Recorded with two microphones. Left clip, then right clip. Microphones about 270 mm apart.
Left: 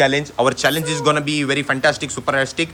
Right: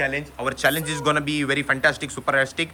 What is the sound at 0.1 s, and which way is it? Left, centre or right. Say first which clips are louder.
Speech: left 9 dB; centre.